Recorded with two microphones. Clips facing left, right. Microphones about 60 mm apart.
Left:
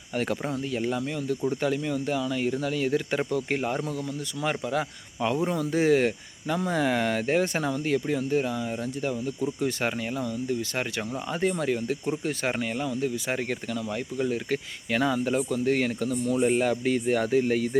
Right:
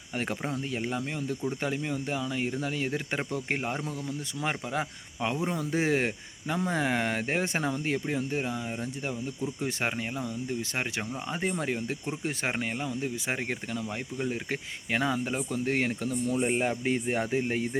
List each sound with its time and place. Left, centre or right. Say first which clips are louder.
0.1 s speech: left 4 dB; right